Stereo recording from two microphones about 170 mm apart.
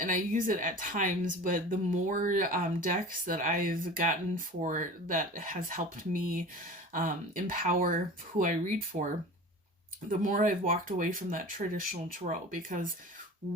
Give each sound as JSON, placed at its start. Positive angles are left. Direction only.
{"t": 0.0, "sound": "speech", "side_deg": -50}
{"t": 10.1, "sound": "speech", "side_deg": -50}